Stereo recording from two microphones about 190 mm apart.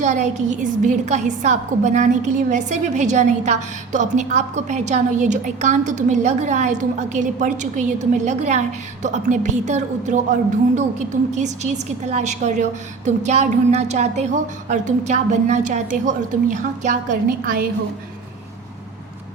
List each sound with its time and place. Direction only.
0.0 s a woman's voice: 40° right (ahead or behind)